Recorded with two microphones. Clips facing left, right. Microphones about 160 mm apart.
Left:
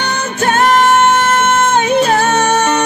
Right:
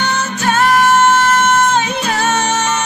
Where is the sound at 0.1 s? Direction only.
55° left (ahead or behind).